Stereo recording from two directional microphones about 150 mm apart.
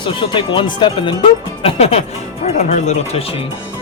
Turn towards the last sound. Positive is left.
turn(degrees=55)  # may be behind; listen again after turning